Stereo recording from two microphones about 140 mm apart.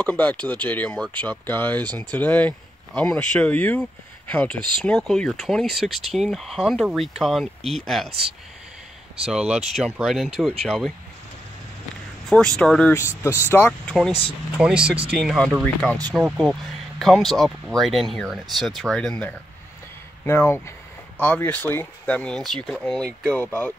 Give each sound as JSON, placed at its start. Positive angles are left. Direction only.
{"t": 0.0, "sound": "speech", "side_deg": 10}
{"t": 9.2, "sound": "speech", "side_deg": -5}
{"t": 12.3, "sound": "speech", "side_deg": 5}
{"t": 13.2, "sound": "speech", "side_deg": 20}
{"t": 13.7, "sound": "speech", "side_deg": 5}
{"t": 14.6, "sound": "speech", "side_deg": -5}
{"t": 17.0, "sound": "speech", "side_deg": 0}